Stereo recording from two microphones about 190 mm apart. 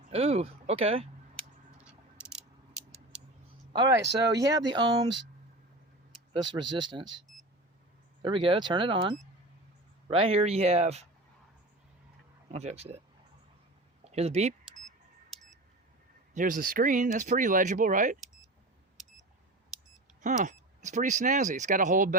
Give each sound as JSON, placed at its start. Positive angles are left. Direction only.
{"t": 0.1, "sound": "speech", "side_deg": -30}
{"t": 1.8, "sound": "a sound", "side_deg": -5}
{"t": 3.7, "sound": "speech", "side_deg": -20}
{"t": 6.3, "sound": "speech", "side_deg": -25}
{"t": 8.2, "sound": "speech", "side_deg": -25}
{"t": 10.1, "sound": "speech", "side_deg": -30}
{"t": 12.5, "sound": "speech", "side_deg": -35}
{"t": 14.0, "sound": "speech", "side_deg": -35}
{"t": 15.3, "sound": "a sound", "side_deg": 0}
{"t": 16.3, "sound": "speech", "side_deg": -45}
{"t": 20.2, "sound": "speech", "side_deg": -40}